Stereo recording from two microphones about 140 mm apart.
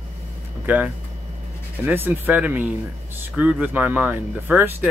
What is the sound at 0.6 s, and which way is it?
Speech, 10° right (ahead or behind).